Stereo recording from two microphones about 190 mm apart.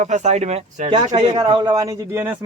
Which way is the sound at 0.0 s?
35° right (ahead or behind).